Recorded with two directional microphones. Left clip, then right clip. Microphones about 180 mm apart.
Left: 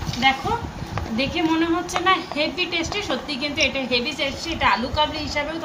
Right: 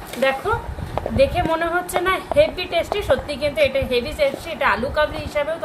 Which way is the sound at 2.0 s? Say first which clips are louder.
Right 3 dB; 65° right (ahead or behind).